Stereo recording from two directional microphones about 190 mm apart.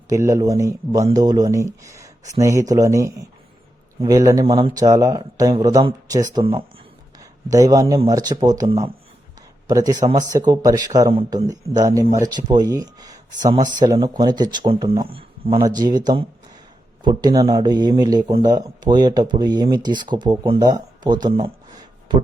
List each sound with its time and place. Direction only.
0.1 s speech: 15° right (ahead or behind)